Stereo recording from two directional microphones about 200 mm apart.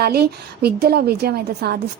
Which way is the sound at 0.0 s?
50° right (ahead or behind).